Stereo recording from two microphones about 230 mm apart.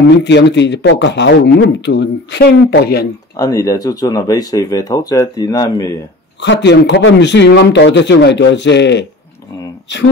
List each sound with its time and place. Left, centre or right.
0.2 s speech: left
3.3 s speech: centre
6.4 s speech: left